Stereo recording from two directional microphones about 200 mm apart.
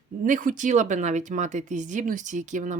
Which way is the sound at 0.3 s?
40° right (ahead or behind).